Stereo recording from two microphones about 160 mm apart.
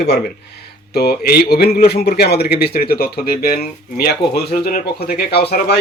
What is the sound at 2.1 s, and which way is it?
Speech, 90° left.